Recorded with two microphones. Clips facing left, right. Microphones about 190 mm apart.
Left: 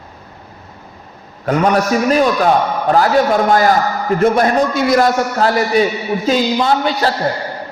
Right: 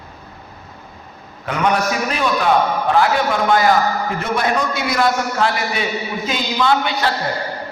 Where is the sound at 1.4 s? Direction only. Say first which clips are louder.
Left 5 dB; 40° left (ahead or behind).